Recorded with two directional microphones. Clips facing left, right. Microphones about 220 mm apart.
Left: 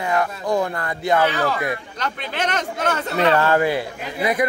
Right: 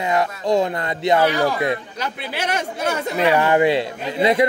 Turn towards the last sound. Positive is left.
turn(degrees=-25)  # may be behind; listen again after turning